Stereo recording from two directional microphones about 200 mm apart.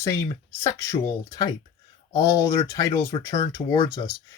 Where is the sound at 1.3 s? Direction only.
20° left (ahead or behind).